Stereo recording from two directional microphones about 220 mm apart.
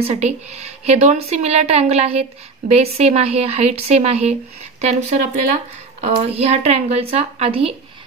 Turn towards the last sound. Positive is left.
turn(degrees=-25)  # may be behind; listen again after turning